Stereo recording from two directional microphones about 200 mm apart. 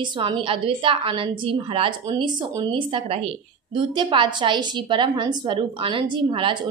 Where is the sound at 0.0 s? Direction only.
25° right (ahead or behind).